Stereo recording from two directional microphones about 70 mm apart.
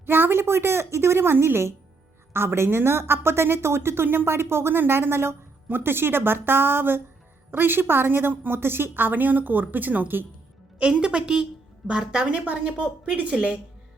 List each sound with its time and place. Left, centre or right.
0.0 s a woman's voice: right
11.0 s a woman's voice: centre